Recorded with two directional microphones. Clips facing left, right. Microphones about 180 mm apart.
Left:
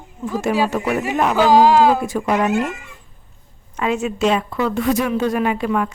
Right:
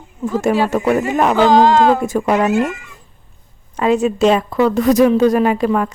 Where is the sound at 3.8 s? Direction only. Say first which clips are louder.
Right 6 dB; 35° right (ahead or behind).